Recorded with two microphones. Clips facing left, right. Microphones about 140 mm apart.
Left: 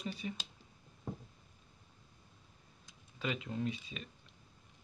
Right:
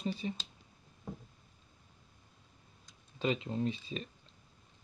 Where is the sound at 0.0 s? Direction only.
30° right (ahead or behind).